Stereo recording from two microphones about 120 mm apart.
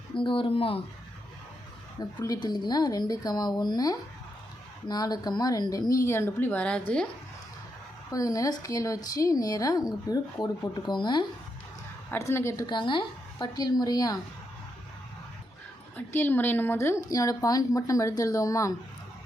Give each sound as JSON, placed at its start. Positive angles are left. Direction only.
{"t": 0.1, "sound": "speech", "side_deg": 45}
{"t": 2.0, "sound": "a woman's voice", "side_deg": 35}
{"t": 8.1, "sound": "a woman's voice", "side_deg": 30}
{"t": 12.1, "sound": "speech", "side_deg": 20}
{"t": 12.6, "sound": "a woman's voice", "side_deg": 40}
{"t": 16.0, "sound": "speech", "side_deg": 15}